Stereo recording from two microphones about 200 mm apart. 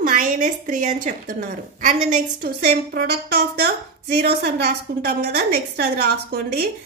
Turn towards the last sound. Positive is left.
turn(degrees=-55)  # may be behind; listen again after turning